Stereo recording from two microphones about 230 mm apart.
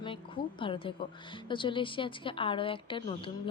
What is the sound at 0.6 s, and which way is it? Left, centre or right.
Speech, left.